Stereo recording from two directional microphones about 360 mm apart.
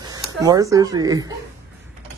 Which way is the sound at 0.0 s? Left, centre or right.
Centre.